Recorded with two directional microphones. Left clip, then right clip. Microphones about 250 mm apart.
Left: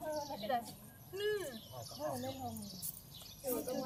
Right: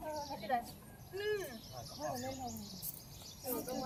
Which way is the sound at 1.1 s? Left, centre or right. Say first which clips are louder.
Left 1 dB; left.